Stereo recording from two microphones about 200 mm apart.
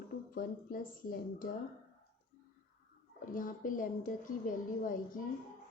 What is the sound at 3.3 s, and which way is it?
A woman's voice, 40° left (ahead or behind).